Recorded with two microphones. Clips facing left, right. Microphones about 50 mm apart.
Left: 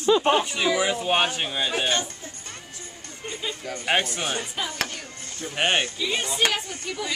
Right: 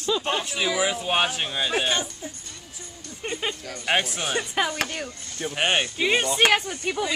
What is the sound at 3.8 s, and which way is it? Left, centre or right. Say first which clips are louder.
Speech: even; centre.